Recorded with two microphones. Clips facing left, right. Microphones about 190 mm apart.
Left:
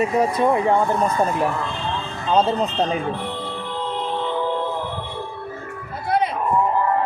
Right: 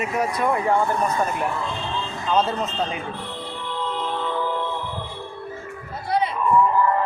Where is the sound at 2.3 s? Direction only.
35° left (ahead or behind).